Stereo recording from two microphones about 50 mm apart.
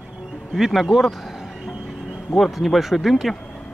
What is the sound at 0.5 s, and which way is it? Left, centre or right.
Speech, centre.